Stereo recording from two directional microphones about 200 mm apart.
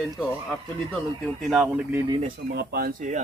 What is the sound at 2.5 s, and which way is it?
Speech, 55° right (ahead or behind).